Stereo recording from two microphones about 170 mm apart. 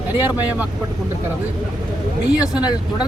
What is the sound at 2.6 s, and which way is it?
Speech, 25° left (ahead or behind).